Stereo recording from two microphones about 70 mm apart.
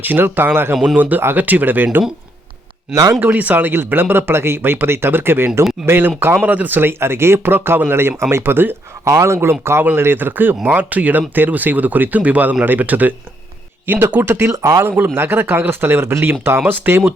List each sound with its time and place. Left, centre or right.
0.0 s speech: right
2.9 s speech: right
3.2 s speech: right
14.5 s speech: right
14.8 s speech: right